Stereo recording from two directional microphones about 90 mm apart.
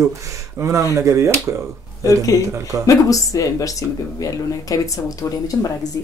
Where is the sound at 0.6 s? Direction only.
35° right (ahead or behind).